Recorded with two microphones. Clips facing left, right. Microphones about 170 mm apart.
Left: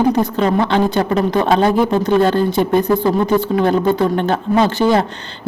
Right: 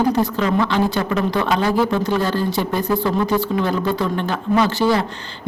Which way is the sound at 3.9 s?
55° left (ahead or behind).